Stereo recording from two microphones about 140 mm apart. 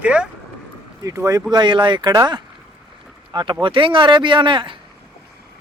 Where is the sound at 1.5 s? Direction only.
35° right (ahead or behind).